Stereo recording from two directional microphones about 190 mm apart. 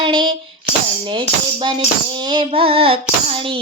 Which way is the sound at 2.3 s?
25° right (ahead or behind).